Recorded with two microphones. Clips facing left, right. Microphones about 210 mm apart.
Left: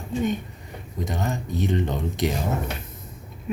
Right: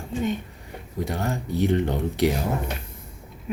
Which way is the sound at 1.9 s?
15° right (ahead or behind).